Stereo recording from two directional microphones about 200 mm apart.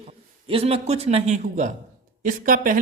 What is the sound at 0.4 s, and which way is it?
Speech, 30° right (ahead or behind).